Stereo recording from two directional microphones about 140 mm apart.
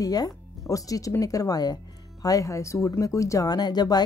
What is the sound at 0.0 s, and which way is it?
Speech, 25° left (ahead or behind).